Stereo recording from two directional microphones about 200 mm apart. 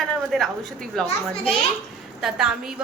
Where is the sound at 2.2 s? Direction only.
5° right (ahead or behind).